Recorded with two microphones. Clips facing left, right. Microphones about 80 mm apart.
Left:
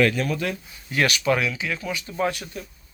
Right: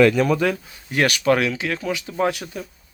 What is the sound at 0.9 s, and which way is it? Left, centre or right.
Speech, right.